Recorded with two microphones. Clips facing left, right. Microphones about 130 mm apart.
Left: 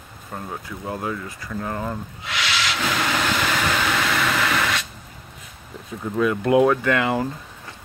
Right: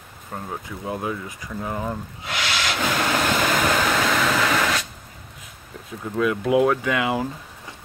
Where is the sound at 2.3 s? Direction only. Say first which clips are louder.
Even; 45° right (ahead or behind).